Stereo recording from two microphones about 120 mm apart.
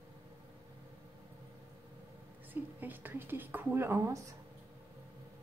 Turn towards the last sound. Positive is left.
turn(degrees=-20)  # may be behind; listen again after turning